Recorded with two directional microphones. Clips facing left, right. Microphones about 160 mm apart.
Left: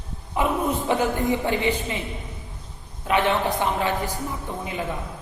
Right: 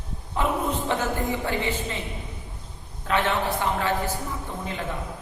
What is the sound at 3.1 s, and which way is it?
A woman's voice, 15° left (ahead or behind).